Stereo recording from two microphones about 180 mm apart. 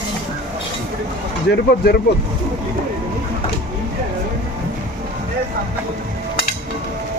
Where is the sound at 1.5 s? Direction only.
65° left (ahead or behind).